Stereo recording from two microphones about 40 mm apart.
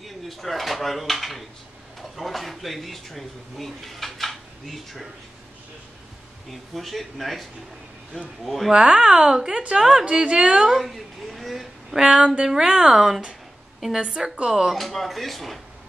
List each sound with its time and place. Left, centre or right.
0.0 s speech: centre
6.5 s speech: centre
8.5 s speech: centre
8.7 s a woman's voice: centre
10.7 s speech: centre
11.9 s a woman's voice: centre
12.9 s a woman's voice: centre
14.0 s a woman's voice: right
14.7 s speech: centre